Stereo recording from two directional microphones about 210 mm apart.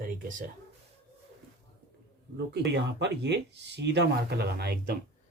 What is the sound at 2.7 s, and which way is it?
Speech, 55° right (ahead or behind).